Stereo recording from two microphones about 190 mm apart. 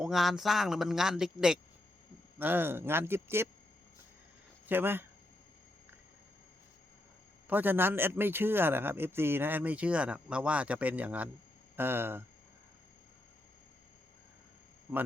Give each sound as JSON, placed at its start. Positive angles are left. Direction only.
{"t": 0.0, "sound": "a man's voice", "side_deg": 0}
{"t": 4.6, "sound": "speech", "side_deg": -10}
{"t": 7.4, "sound": "a man's voice", "side_deg": -10}